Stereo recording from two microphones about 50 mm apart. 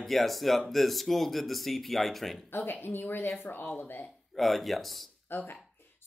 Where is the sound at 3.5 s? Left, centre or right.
Left.